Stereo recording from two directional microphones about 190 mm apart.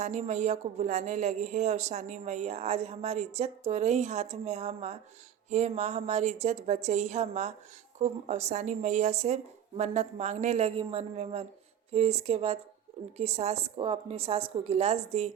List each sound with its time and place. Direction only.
0.0 s speech: 40° right (ahead or behind)